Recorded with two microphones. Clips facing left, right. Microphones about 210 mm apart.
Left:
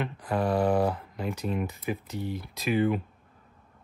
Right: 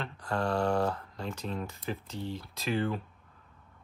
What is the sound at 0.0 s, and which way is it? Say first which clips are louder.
Speech: left 4 dB; 15° left (ahead or behind).